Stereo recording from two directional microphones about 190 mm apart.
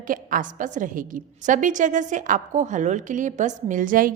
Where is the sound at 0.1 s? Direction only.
45° right (ahead or behind).